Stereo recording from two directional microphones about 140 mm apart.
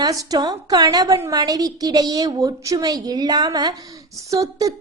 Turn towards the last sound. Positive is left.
turn(degrees=-25)  # may be behind; listen again after turning